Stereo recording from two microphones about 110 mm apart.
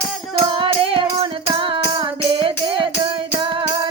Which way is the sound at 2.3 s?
50° right (ahead or behind).